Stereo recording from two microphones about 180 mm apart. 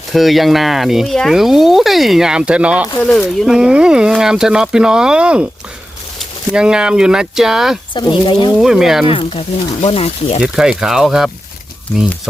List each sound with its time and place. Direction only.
0.1 s speech: centre (ahead or behind)
3.0 s speech: 5° left (ahead or behind)
6.5 s speech: 5° right (ahead or behind)
7.9 s speech: 25° left (ahead or behind)
8.5 s speech: 5° right (ahead or behind)
9.0 s speech: 30° left (ahead or behind)
10.4 s speech: 5° right (ahead or behind)